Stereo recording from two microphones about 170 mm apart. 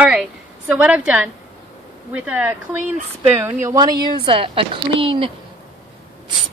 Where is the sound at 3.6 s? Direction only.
20° right (ahead or behind).